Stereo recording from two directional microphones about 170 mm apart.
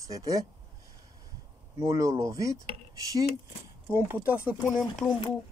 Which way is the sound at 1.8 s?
20° right (ahead or behind).